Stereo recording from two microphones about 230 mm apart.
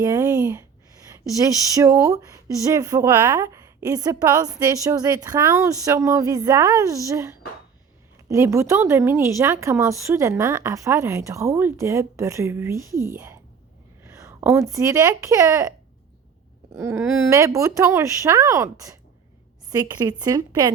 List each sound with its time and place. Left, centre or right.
0.0 s speech: centre
16.7 s speech: centre